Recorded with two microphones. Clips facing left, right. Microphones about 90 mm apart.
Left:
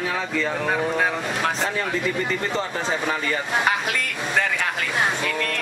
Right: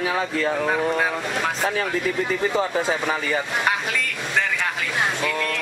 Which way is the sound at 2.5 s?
10° right (ahead or behind).